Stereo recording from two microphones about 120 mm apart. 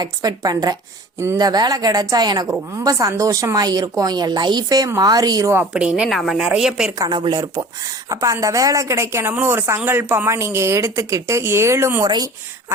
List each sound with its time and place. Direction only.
0.0 s a woman's voice: 30° right (ahead or behind)
5.7 s a woman's voice: 5° right (ahead or behind)
7.0 s a woman's voice: 40° right (ahead or behind); by 12.0 s 20° right (ahead or behind)
12.0 s a woman's voice: 30° right (ahead or behind)